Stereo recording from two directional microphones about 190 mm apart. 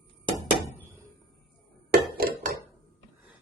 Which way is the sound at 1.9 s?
50° right (ahead or behind).